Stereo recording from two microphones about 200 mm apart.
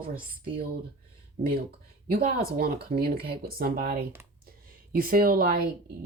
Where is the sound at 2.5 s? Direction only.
50° right (ahead or behind).